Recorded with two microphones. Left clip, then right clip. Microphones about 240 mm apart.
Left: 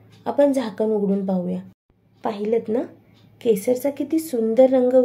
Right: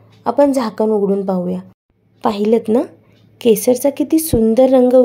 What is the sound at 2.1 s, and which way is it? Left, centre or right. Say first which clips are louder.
A woman's voice: right 8 dB; right.